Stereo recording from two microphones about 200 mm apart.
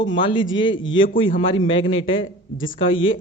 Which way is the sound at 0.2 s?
25° left (ahead or behind).